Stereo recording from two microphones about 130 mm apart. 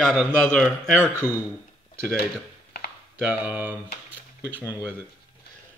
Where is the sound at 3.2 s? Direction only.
10° right (ahead or behind).